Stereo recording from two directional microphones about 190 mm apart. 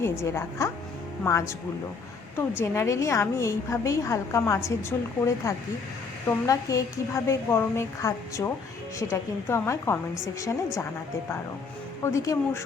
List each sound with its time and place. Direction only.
0.0 s a woman's voice: 15° left (ahead or behind)
12.0 s a woman's voice: 15° left (ahead or behind)